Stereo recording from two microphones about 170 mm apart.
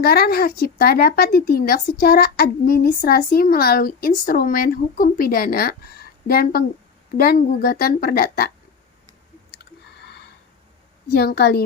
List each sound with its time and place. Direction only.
0.0 s speech: 65° left (ahead or behind)
10.0 s a sound: 75° left (ahead or behind)
11.1 s a woman's voice: 65° left (ahead or behind)